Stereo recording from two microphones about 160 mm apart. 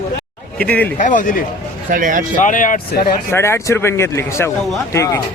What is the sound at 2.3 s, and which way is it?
Speech, 55° left (ahead or behind).